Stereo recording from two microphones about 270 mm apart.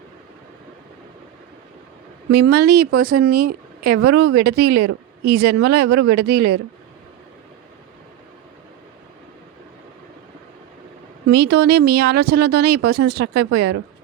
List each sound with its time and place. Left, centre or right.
2.3 s speech: right
11.3 s speech: right